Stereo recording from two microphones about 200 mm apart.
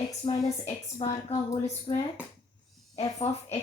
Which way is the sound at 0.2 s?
30° left (ahead or behind).